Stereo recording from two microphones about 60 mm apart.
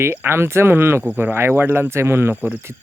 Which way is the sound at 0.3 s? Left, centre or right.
Right.